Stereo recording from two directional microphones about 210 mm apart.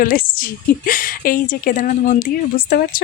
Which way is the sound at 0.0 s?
40° left (ahead or behind).